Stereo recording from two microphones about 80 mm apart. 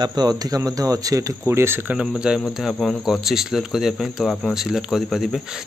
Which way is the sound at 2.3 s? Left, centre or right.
Centre.